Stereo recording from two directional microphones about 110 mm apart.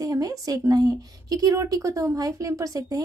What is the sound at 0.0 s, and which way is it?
A woman's voice, 35° right (ahead or behind).